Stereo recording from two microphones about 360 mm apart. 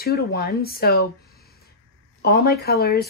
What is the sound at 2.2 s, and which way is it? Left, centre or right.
Speech, left.